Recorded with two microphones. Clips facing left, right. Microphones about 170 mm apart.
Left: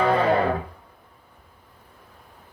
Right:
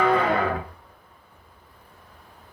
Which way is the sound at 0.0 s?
30° left (ahead or behind).